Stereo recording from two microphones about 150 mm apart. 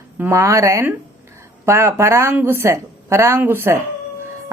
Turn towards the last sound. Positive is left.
turn(degrees=-15)  # may be behind; listen again after turning